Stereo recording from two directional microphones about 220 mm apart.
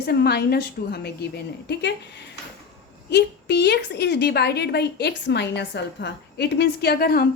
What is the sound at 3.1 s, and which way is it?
A woman's voice, 50° left (ahead or behind).